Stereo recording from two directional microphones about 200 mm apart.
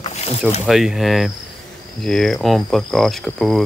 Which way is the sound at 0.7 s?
Centre (ahead or behind).